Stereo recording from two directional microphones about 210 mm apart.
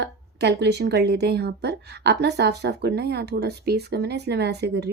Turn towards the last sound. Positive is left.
turn(degrees=-50)  # may be behind; listen again after turning